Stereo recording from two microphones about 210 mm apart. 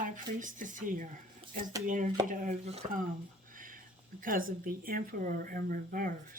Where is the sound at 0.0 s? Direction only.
40° right (ahead or behind).